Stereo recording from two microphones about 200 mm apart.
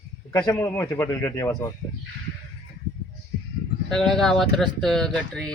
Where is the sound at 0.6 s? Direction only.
15° left (ahead or behind).